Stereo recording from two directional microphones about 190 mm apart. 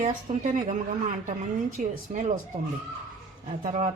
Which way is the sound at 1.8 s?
35° right (ahead or behind).